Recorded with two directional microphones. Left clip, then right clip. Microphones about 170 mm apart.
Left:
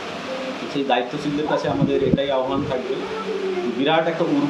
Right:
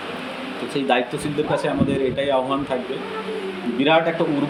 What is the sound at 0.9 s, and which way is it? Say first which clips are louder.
Speech: right 1 dB; 50° right (ahead or behind).